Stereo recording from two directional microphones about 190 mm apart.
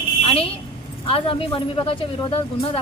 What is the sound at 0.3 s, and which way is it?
A woman's voice, 30° left (ahead or behind).